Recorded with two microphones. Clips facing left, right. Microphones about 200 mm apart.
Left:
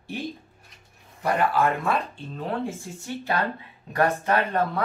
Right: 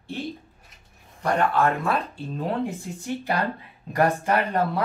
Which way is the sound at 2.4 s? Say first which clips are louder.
Right 2 dB; 15° right (ahead or behind).